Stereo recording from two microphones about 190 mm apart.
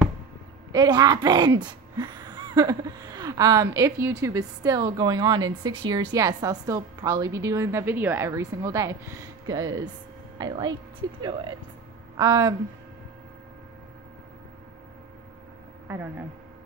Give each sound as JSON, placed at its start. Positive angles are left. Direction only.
{"t": 0.7, "sound": "a woman's voice", "side_deg": -20}
{"t": 15.9, "sound": "a woman's voice", "side_deg": -10}